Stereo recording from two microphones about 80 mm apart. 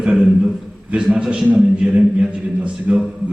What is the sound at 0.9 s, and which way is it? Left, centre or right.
A man's voice, centre.